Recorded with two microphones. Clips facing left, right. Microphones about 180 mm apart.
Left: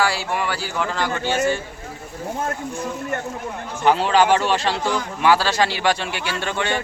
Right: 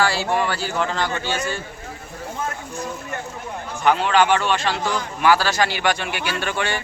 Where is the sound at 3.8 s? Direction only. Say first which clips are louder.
Left 1 dB; 35° left (ahead or behind).